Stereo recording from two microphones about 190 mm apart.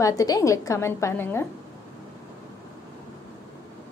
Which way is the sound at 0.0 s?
20° left (ahead or behind).